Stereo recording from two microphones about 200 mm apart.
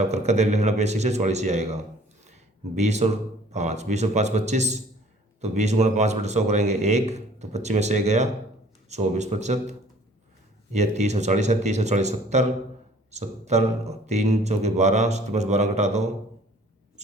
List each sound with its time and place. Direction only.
0.1 s speech: 35° right (ahead or behind)
2.8 s speech: 35° right (ahead or behind)